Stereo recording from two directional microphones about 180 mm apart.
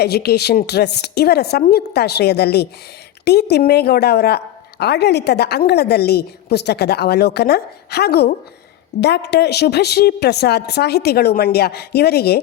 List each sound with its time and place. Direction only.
0.0 s a woman's voice: 65° left (ahead or behind)